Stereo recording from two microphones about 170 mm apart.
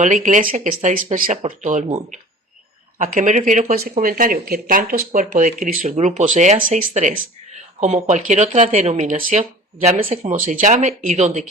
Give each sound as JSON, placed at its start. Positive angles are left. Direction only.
{"t": 0.0, "sound": "speech", "side_deg": -45}